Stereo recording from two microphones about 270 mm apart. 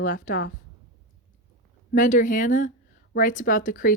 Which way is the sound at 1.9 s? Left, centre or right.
Left.